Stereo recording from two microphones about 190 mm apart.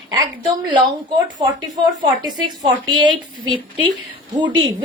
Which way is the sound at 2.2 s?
25° right (ahead or behind).